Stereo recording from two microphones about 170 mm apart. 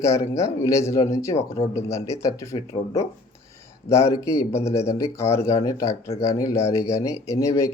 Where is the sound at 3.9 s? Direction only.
15° left (ahead or behind).